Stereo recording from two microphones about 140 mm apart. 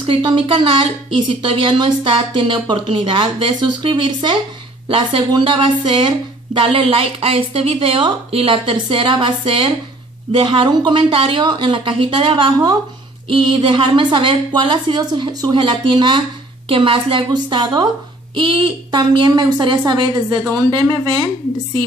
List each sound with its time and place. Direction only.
0.0 s speech: 40° right (ahead or behind)